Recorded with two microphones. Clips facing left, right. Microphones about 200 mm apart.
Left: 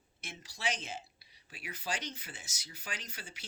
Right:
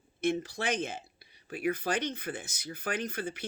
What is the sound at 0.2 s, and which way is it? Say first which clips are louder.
Speech: right 15 dB; 55° right (ahead or behind).